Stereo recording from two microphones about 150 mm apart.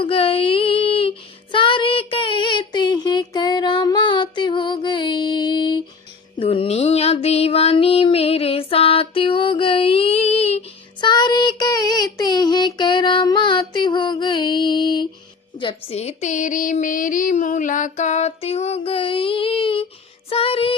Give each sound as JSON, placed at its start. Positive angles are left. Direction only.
{"t": 0.0, "sound": "child singing", "side_deg": 40}
{"t": 6.3, "sound": "music", "side_deg": 35}
{"t": 11.0, "sound": "child singing", "side_deg": 30}
{"t": 15.5, "sound": "female singing", "side_deg": 40}
{"t": 20.3, "sound": "child singing", "side_deg": 40}